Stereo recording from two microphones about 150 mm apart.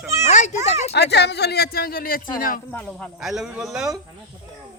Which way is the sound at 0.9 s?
90° left.